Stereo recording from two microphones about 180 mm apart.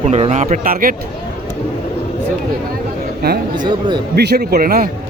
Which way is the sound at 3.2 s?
60° right (ahead or behind).